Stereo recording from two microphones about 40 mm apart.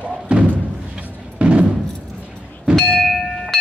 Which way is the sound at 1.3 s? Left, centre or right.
Right.